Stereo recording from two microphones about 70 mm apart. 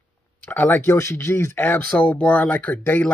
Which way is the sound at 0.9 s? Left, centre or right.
Left.